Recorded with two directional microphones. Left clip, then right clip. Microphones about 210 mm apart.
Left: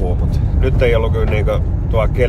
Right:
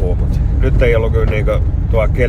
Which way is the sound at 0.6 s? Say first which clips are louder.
Right 1 dB; 15° left (ahead or behind).